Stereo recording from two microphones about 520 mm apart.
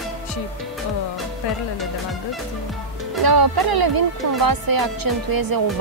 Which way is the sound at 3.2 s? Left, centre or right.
Right.